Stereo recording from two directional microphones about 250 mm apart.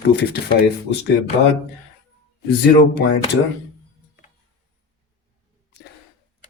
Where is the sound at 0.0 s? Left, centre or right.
Left.